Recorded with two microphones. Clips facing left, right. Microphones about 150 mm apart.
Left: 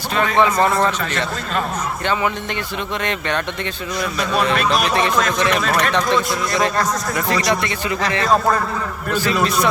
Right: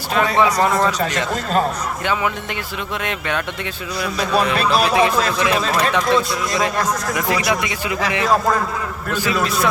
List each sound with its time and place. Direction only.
0.4 s a man's voice: 10° right (ahead or behind)
3.0 s a man's voice: 5° right (ahead or behind)
4.7 s a man's voice: 10° right (ahead or behind)
5.6 s speech: 30° right (ahead or behind)
5.9 s a man's voice: 5° right (ahead or behind)